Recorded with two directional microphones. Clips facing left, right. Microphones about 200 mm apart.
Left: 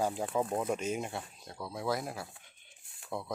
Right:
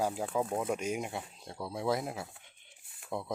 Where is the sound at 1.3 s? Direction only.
25° right (ahead or behind).